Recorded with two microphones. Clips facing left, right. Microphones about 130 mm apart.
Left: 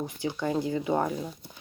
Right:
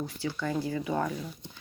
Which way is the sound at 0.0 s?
20° left (ahead or behind).